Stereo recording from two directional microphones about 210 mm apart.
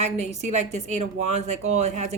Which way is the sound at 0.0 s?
30° right (ahead or behind).